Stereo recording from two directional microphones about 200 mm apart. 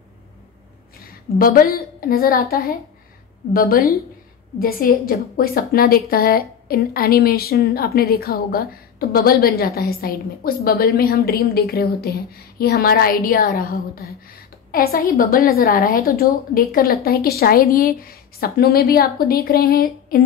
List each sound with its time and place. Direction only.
1.0 s a woman's voice: 45° left (ahead or behind)